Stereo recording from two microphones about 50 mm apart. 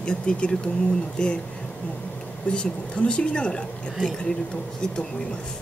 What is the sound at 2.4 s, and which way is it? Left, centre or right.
Speech, centre.